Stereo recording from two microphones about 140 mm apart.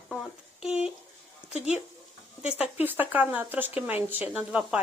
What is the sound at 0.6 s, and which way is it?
Speech, 5° right (ahead or behind).